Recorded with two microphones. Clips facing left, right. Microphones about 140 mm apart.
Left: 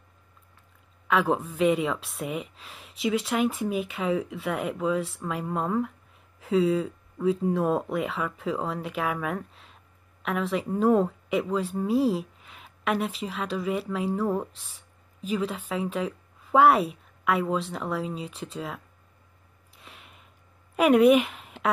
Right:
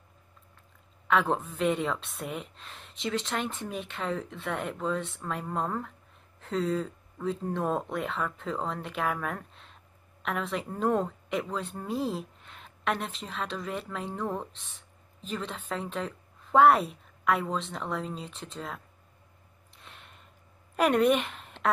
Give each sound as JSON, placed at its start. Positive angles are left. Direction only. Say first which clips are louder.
{"t": 1.0, "sound": "speech", "louder": "left 2 dB", "side_deg": 0}
{"t": 19.7, "sound": "a sound", "louder": "left 2 dB", "side_deg": 5}
{"t": 20.7, "sound": "speech", "louder": "left 5 dB", "side_deg": 5}